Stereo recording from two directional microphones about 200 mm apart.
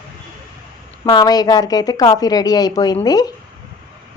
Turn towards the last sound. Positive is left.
turn(degrees=20)  # may be behind; listen again after turning